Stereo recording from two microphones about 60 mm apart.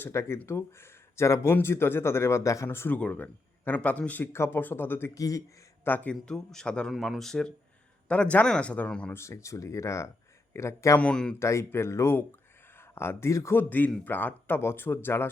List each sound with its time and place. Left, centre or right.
0.1 s speech: left
1.6 s speech: left
2.6 s speech: left
2.9 s a man's voice: left
4.2 s speech: left
5.1 s speech: left
5.8 s speech: left
6.2 s speech: centre
6.9 s speech: centre
8.0 s a man's voice: left
9.1 s speech: left
11.1 s speech: centre
11.3 s speech: left
13.6 s speech: left